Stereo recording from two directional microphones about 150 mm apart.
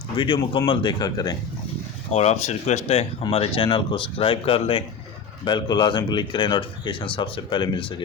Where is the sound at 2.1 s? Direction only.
45° left (ahead or behind).